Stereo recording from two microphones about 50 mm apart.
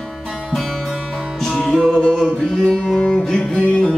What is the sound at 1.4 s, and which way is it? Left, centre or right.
Music, centre.